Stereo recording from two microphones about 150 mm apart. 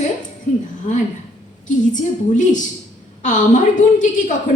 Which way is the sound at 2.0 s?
55° left (ahead or behind).